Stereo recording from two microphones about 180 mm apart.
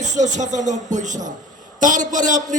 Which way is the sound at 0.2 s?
40° right (ahead or behind).